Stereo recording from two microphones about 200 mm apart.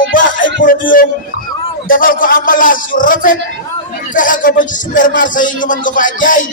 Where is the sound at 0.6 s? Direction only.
45° left (ahead or behind).